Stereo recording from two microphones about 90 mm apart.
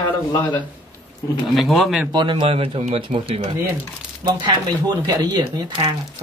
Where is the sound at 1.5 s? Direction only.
Centre (ahead or behind).